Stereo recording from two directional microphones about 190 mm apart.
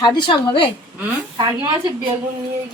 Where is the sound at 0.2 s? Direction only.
25° left (ahead or behind).